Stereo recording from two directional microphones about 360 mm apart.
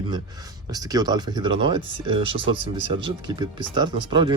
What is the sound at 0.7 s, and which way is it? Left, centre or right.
Speech, centre.